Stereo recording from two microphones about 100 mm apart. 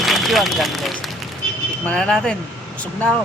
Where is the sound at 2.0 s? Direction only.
5° left (ahead or behind).